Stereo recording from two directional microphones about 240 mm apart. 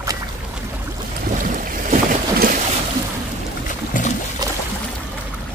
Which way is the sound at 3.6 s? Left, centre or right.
Left.